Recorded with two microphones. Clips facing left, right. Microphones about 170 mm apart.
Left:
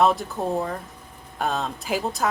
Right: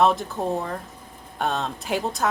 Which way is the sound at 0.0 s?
Centre (ahead or behind).